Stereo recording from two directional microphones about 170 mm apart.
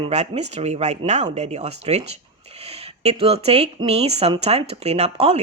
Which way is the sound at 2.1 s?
40° right (ahead or behind).